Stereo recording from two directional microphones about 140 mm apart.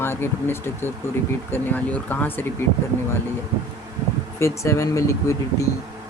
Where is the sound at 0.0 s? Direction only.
15° left (ahead or behind).